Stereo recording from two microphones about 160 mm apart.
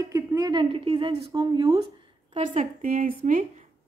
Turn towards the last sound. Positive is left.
turn(degrees=-55)  # may be behind; listen again after turning